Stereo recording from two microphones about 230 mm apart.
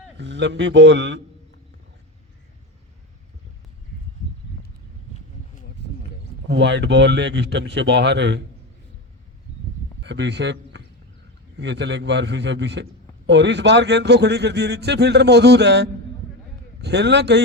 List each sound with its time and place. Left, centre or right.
0.2 s a man's voice: right
5.1 s a sound: left
6.5 s a man's voice: right
10.0 s a man's voice: right